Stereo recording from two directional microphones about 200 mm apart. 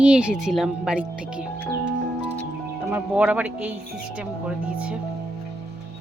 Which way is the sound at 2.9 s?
5° right (ahead or behind).